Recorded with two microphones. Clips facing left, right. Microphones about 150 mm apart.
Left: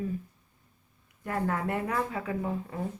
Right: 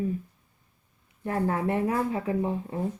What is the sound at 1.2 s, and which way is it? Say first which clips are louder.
Speech: right 4 dB; 25° right (ahead or behind).